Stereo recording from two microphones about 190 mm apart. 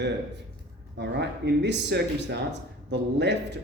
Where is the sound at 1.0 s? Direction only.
65° right (ahead or behind).